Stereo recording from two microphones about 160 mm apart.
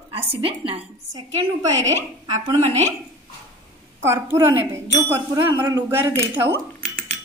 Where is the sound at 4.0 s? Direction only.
15° right (ahead or behind).